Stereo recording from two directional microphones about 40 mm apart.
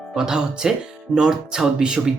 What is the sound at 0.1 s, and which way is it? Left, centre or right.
Speech, centre.